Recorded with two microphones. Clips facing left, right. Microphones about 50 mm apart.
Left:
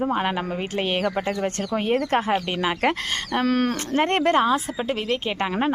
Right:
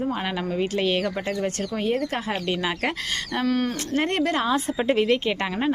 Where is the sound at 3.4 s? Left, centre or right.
Left.